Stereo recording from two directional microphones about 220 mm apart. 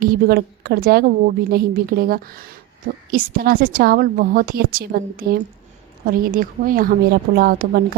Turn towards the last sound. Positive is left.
turn(degrees=-40)  # may be behind; listen again after turning